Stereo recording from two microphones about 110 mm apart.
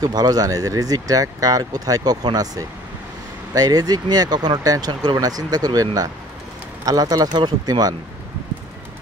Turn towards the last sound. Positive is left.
turn(degrees=-40)  # may be behind; listen again after turning